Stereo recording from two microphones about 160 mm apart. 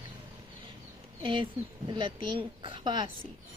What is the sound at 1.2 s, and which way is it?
Speech, 30° right (ahead or behind).